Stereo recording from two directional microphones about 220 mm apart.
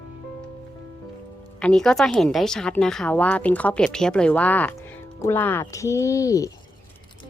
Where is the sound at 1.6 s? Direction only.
5° left (ahead or behind).